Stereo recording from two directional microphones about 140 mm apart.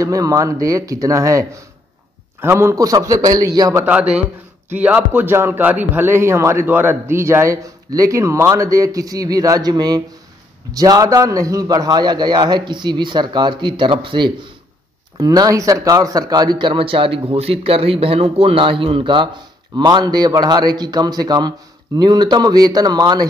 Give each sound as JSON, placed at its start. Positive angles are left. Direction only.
{"t": 0.0, "sound": "speech", "side_deg": -25}
{"t": 4.1, "sound": "speech", "side_deg": -10}